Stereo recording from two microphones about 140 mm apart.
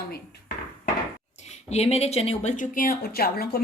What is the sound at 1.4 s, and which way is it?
Speech, 50° left (ahead or behind).